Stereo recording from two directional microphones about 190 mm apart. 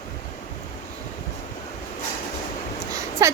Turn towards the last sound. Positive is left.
turn(degrees=-15)  # may be behind; listen again after turning